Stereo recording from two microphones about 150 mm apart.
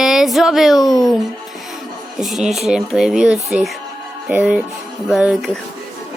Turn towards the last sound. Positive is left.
turn(degrees=0)  # may be behind; listen again after turning